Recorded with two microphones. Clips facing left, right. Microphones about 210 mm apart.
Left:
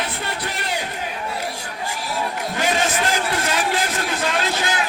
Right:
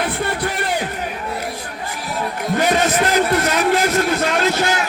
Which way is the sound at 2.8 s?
50° right (ahead or behind).